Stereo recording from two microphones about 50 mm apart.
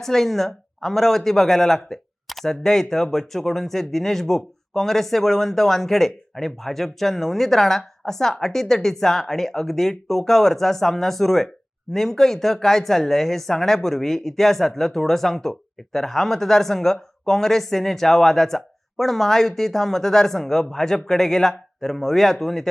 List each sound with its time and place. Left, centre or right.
0.0 s a man's voice: centre